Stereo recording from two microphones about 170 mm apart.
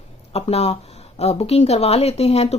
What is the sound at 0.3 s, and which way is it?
Speech, 40° left (ahead or behind).